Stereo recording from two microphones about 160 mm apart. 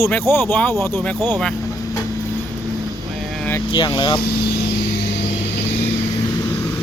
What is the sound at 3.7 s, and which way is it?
Speech, 25° left (ahead or behind).